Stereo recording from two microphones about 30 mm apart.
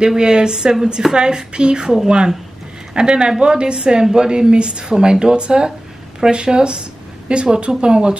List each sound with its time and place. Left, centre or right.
0.2 s a woman's voice: right